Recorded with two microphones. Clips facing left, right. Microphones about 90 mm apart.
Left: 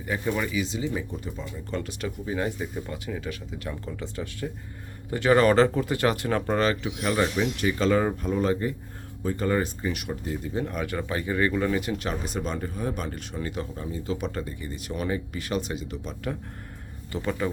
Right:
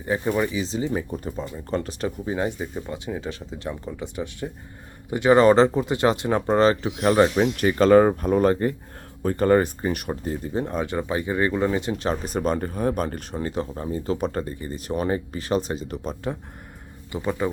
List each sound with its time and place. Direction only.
0.0 s speech: 30° right (ahead or behind)
17.1 s a man's voice: 15° right (ahead or behind)